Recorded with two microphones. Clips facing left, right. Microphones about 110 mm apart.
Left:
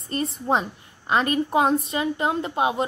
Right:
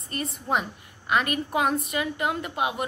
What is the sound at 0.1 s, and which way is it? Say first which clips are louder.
A woman's voice: left 4 dB; 30° left (ahead or behind).